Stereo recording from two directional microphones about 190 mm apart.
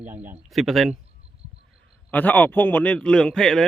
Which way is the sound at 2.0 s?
10° left (ahead or behind).